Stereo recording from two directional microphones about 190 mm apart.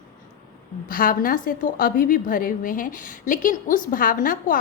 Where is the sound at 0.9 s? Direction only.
45° left (ahead or behind).